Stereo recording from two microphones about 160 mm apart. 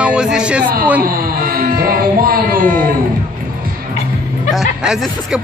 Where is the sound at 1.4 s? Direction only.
65° right (ahead or behind).